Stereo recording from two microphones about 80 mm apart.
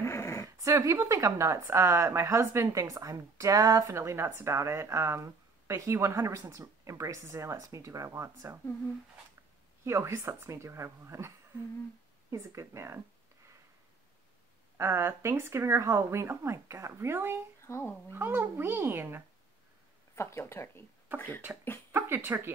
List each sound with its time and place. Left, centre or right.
0.0 s dog: left
0.6 s a woman's voice: right
9.8 s a woman's voice: right
14.8 s a woman's voice: right
17.6 s speech: left
18.1 s speech: right
20.2 s speech: left
21.9 s speech: right